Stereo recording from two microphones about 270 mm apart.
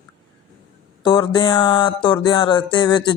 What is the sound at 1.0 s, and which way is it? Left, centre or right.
Music, centre.